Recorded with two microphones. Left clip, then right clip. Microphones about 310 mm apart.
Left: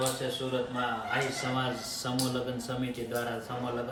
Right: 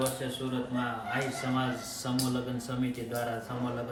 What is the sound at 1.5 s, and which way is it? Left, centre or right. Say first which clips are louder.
Speech: even; centre.